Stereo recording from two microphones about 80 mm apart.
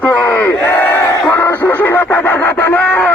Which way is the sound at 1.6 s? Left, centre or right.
Left.